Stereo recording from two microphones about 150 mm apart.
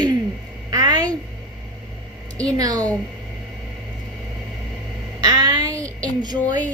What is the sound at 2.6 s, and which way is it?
Speech, 25° right (ahead or behind).